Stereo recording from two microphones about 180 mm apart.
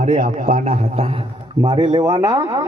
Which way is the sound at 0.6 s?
35° right (ahead or behind).